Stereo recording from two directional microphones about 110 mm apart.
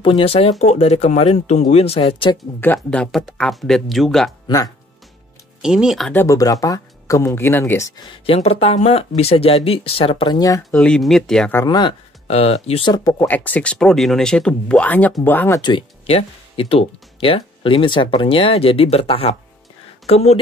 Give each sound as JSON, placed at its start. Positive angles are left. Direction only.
{"t": 0.0, "sound": "speech", "side_deg": 55}
{"t": 2.6, "sound": "speech", "side_deg": 15}
{"t": 5.6, "sound": "speech", "side_deg": -5}
{"t": 6.1, "sound": "speech", "side_deg": 30}
{"t": 8.3, "sound": "speech", "side_deg": 65}
{"t": 10.3, "sound": "speech", "side_deg": 35}
{"t": 10.7, "sound": "speech", "side_deg": 10}
{"t": 11.6, "sound": "speech", "side_deg": 40}
{"t": 12.3, "sound": "speech", "side_deg": 70}
{"t": 12.9, "sound": "speech", "side_deg": 30}
{"t": 13.3, "sound": "speech", "side_deg": 15}
{"t": 16.1, "sound": "speech", "side_deg": 60}